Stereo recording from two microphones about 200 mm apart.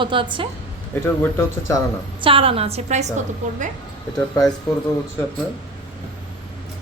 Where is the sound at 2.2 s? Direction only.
25° right (ahead or behind).